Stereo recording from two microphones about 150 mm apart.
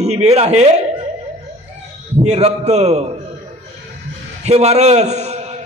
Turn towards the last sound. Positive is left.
turn(degrees=-45)  # may be behind; listen again after turning